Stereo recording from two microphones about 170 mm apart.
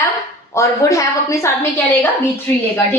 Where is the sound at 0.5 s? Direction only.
20° left (ahead or behind).